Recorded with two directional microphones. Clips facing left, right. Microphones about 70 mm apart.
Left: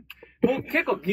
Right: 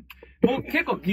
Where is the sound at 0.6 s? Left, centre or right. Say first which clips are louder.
Left 1 dB; centre.